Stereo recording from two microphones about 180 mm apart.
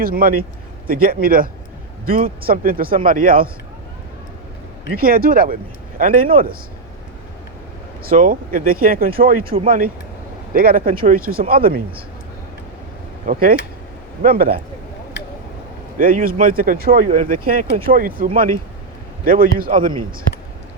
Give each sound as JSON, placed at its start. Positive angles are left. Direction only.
{"t": 0.0, "sound": "speech", "side_deg": -55}
{"t": 4.9, "sound": "speech", "side_deg": -55}
{"t": 8.0, "sound": "speech", "side_deg": -50}
{"t": 13.2, "sound": "speech", "side_deg": -50}
{"t": 16.0, "sound": "speech", "side_deg": -50}